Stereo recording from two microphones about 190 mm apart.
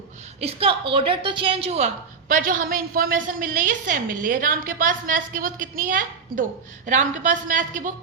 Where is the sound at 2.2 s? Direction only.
45° right (ahead or behind).